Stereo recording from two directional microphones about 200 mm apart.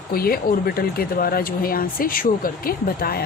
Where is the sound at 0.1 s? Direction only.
45° left (ahead or behind).